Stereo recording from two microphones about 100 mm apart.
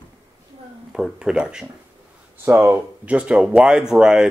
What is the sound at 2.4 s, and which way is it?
Speech, 20° right (ahead or behind).